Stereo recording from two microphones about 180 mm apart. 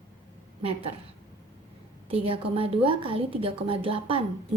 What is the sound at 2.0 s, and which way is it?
A woman's voice, 30° right (ahead or behind).